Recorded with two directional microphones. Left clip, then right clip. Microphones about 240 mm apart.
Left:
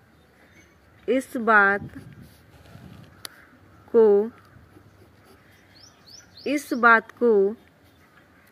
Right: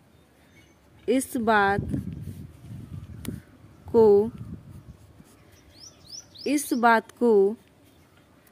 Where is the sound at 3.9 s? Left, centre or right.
Centre.